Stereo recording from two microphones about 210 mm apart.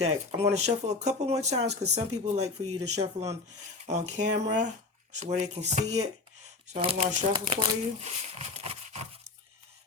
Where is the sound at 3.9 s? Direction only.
35° right (ahead or behind).